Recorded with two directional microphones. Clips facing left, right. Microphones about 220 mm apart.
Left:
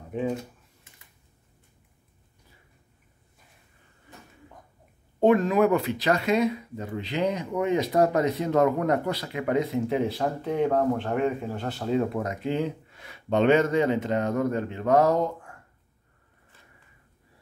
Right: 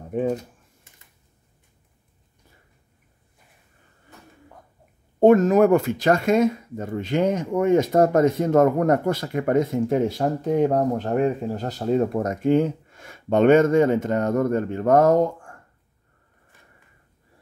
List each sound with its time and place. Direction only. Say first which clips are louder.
5.2 s speech: right 5 dB; 45° right (ahead or behind)